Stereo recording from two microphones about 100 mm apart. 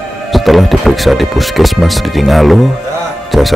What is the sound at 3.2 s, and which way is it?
Music, centre (ahead or behind).